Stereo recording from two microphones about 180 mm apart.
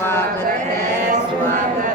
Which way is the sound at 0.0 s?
15° left (ahead or behind).